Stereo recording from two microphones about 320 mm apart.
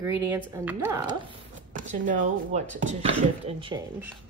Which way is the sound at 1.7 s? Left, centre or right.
Right.